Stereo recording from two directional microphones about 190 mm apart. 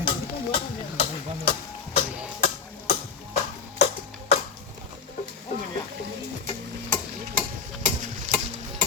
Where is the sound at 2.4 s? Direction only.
50° left (ahead or behind).